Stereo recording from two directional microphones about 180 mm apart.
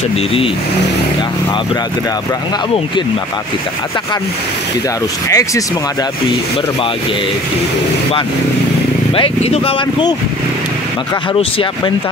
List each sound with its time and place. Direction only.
5.3 s speech: 15° left (ahead or behind)
9.1 s speech: 35° left (ahead or behind)
11.3 s speech: 30° left (ahead or behind)